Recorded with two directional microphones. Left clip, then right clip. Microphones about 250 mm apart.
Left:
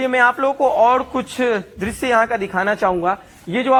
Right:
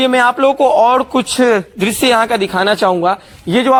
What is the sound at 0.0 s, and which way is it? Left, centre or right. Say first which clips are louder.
A man's voice: right 5 dB; right.